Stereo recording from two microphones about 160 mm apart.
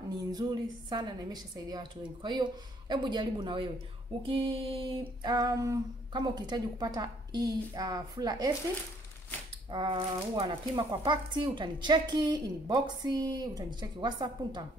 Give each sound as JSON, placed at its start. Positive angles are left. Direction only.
{"t": 0.3, "sound": "speech", "side_deg": -25}
{"t": 9.7, "sound": "speech", "side_deg": -30}